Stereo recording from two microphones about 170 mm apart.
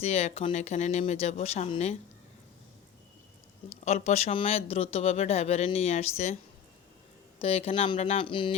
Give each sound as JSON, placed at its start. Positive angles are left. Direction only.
{"t": 0.0, "sound": "speech", "side_deg": 40}
{"t": 3.7, "sound": "speech", "side_deg": 40}
{"t": 7.3, "sound": "speech", "side_deg": 35}